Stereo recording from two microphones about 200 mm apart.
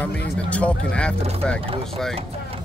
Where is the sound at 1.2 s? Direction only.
30° right (ahead or behind).